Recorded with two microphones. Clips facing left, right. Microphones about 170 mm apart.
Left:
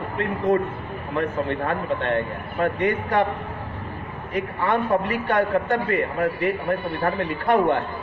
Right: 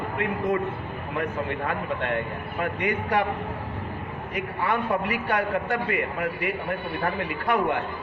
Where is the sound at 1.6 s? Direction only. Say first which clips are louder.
Left 4 dB; 40° left (ahead or behind).